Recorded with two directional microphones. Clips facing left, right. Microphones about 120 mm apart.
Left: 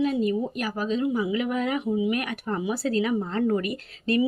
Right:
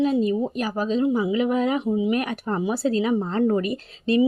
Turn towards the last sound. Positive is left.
turn(degrees=-25)  # may be behind; listen again after turning